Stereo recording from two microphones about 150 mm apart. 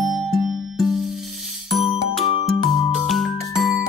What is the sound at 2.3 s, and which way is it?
Music, 30° left (ahead or behind).